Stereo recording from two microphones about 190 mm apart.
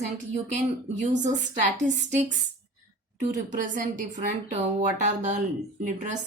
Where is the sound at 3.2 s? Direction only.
45° right (ahead or behind).